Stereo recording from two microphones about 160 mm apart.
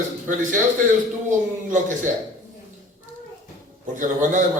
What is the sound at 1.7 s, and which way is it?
Speech, 50° right (ahead or behind).